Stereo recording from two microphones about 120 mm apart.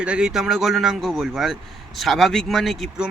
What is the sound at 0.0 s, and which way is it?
Speech, 10° right (ahead or behind).